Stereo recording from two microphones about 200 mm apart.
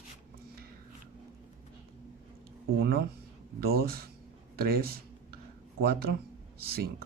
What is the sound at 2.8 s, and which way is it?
Speech, 50° right (ahead or behind).